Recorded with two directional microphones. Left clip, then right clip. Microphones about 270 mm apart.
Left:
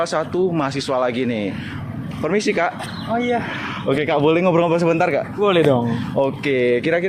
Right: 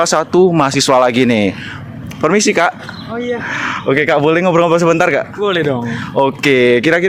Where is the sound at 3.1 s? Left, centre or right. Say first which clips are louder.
Even; centre.